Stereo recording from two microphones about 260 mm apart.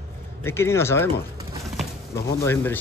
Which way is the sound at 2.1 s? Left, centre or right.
Centre.